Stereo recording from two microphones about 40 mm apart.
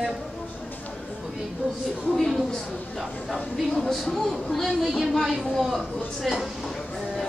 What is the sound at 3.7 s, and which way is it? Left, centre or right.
Speech, centre.